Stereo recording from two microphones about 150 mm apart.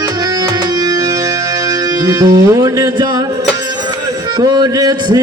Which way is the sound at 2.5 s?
20° right (ahead or behind).